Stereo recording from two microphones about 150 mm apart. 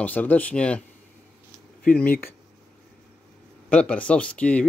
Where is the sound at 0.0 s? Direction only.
10° left (ahead or behind).